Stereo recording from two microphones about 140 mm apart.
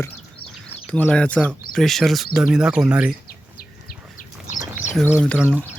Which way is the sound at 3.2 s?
90° left.